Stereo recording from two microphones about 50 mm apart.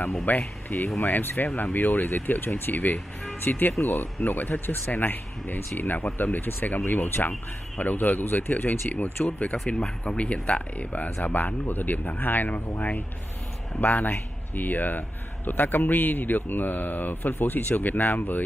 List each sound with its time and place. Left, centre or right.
0.2 s a man's voice: left
1.6 s a man's voice: left
3.8 s speech: left
4.2 s a man's voice: left
11.1 s a man's voice: left